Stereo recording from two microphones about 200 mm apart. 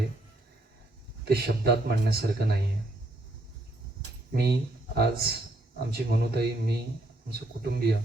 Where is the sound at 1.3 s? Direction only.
50° right (ahead or behind).